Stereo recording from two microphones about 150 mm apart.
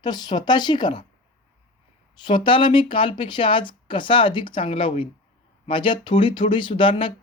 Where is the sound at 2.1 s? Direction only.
30° left (ahead or behind).